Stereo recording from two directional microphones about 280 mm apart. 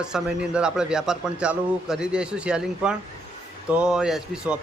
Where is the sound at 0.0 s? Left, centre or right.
Centre.